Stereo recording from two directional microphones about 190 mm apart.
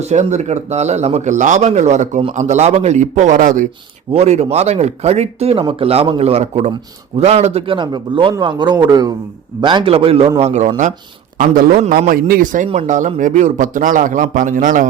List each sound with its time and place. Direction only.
0.0 s speech: 35° right (ahead or behind)
4.1 s a man's voice: 35° right (ahead or behind)